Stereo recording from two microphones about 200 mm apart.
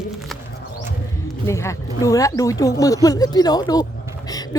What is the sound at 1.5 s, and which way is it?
A woman's voice, 15° left (ahead or behind).